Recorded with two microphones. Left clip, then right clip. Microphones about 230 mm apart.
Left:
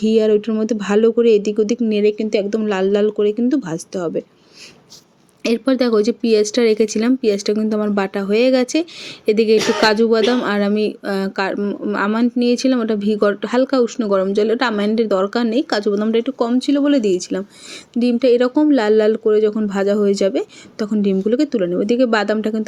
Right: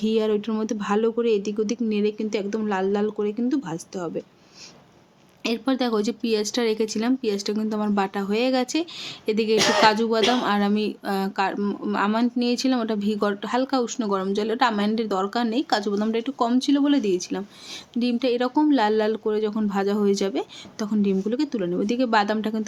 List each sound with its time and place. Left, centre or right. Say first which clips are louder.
0.0 s speech: left 8 dB; centre
5.4 s speech: left 8 dB; centre